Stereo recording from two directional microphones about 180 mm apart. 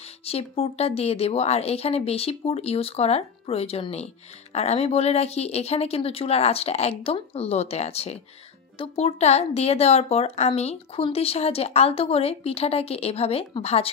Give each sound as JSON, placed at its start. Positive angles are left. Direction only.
{"t": 0.0, "sound": "a woman's voice", "side_deg": 35}